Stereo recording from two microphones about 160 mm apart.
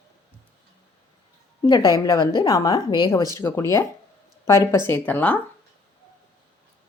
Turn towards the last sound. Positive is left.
turn(degrees=10)  # may be behind; listen again after turning